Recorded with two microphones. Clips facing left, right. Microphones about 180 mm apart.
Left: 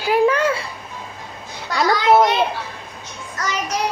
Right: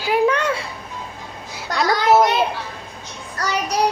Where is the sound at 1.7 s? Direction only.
Centre (ahead or behind).